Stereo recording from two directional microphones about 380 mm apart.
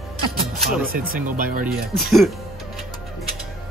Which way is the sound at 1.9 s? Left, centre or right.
Centre.